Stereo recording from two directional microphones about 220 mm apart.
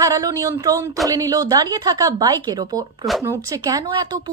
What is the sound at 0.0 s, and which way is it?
Speech, 15° right (ahead or behind).